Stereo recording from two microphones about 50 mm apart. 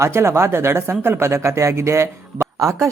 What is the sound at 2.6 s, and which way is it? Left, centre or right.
Speech, right.